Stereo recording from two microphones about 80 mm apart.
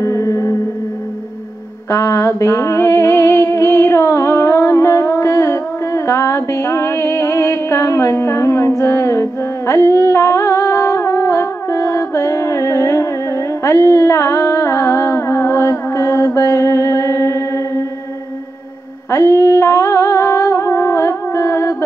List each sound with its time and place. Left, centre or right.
0.0 s music: left
1.9 s a sound: left
19.0 s music: left